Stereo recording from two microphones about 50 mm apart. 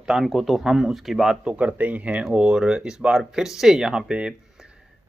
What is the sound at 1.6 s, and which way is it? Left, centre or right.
Speech, right.